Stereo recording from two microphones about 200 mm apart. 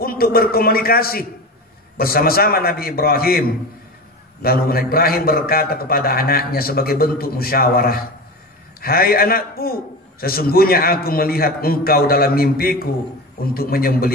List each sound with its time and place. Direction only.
0.0 s a man's voice: 50° left (ahead or behind)